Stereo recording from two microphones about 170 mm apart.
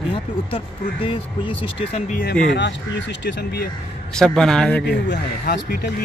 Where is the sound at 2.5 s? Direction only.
90° left.